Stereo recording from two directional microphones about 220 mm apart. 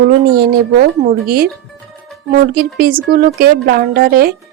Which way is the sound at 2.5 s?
45° right (ahead or behind).